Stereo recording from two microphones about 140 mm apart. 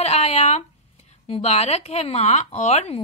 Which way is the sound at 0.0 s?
50° left (ahead or behind).